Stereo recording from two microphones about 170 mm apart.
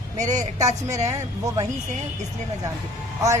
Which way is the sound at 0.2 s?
45° right (ahead or behind).